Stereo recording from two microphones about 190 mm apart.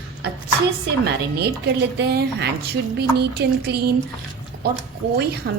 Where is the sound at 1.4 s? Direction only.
60° right (ahead or behind).